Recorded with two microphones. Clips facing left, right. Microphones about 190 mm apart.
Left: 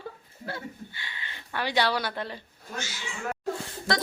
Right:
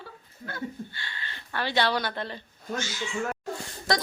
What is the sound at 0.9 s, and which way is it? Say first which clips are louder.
Speech: right 1 dB; 15° left (ahead or behind).